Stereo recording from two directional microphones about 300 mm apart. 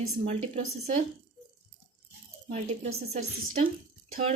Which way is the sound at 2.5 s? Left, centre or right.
Right.